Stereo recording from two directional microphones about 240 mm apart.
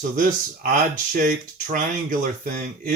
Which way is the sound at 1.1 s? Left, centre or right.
Right.